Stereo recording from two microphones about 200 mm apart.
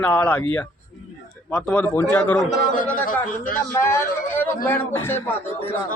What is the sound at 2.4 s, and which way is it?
Speech, 40° left (ahead or behind).